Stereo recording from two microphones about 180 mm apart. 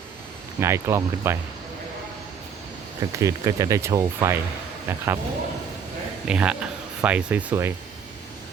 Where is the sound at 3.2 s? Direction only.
15° right (ahead or behind).